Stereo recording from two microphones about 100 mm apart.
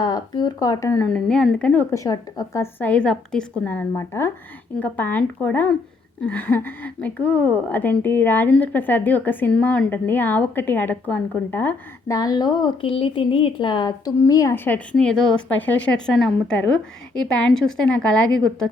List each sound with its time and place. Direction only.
0.0 s speech: 45° left (ahead or behind)
1.0 s a woman's voice: 5° left (ahead or behind)
1.9 s a woman's voice: 30° left (ahead or behind)
2.8 s a woman's voice: 10° left (ahead or behind)
12.0 s speech: 40° left (ahead or behind)
12.8 s speech: 60° left (ahead or behind); by 14.1 s 45° left (ahead or behind)
14.2 s speech: 35° left (ahead or behind)
14.5 s a woman's voice: 20° left (ahead or behind)
14.9 s a woman's voice: 5° left (ahead or behind)